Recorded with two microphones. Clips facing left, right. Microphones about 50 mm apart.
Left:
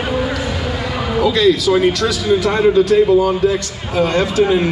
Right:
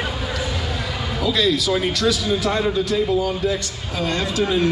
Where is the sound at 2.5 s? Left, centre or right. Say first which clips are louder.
Left 11 dB; left.